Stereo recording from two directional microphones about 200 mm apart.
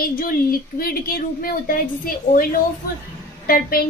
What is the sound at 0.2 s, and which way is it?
A woman's voice, 45° left (ahead or behind).